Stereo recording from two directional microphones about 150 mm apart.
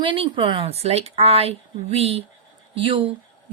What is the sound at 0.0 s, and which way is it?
A woman's voice, 35° right (ahead or behind).